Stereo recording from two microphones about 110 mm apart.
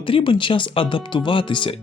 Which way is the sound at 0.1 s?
50° left (ahead or behind).